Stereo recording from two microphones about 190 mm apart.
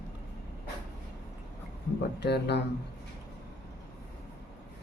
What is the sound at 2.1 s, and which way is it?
Speech, 60° left (ahead or behind).